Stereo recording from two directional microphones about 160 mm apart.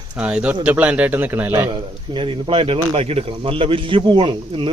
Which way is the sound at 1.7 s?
30° right (ahead or behind).